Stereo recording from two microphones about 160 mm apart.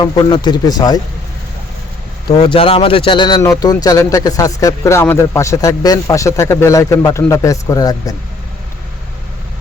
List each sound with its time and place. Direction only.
0.0 s speech: 30° left (ahead or behind)
2.3 s speech: 30° left (ahead or behind)